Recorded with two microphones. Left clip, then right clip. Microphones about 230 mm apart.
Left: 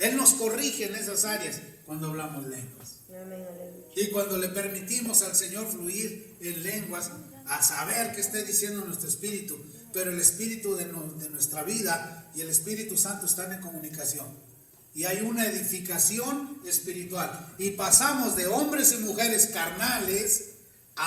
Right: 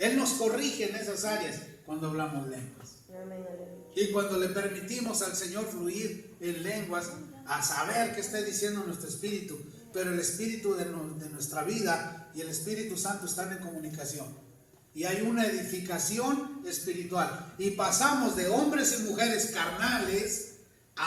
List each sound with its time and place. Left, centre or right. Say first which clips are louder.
0.0 s a man's voice: left 2 dB; left
3.9 s a man's voice: even; left